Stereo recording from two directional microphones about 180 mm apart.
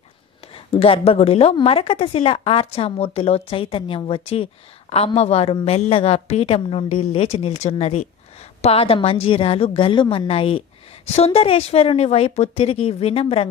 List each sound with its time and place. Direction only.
0.7 s a woman's voice: 30° left (ahead or behind)